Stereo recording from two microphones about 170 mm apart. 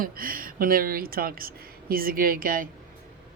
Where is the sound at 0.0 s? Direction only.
55° right (ahead or behind).